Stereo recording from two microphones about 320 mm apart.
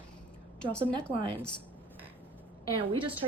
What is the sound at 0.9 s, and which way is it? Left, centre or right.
Speech, centre.